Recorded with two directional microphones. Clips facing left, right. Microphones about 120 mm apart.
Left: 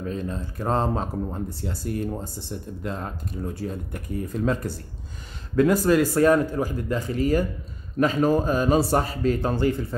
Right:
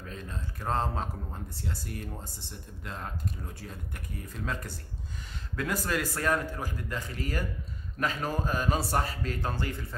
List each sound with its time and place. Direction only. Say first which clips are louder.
0.0 s speech: left 11 dB; 25° left (ahead or behind)
5.6 s speech: left 13 dB; 30° left (ahead or behind)